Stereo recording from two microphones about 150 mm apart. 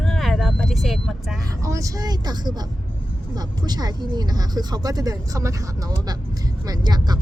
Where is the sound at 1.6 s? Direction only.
20° right (ahead or behind).